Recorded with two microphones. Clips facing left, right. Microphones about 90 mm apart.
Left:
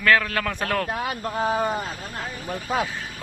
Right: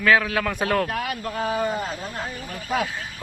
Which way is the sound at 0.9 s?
25° left (ahead or behind).